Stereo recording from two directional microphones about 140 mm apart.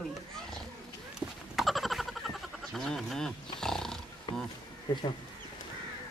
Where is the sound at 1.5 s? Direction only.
Centre (ahead or behind).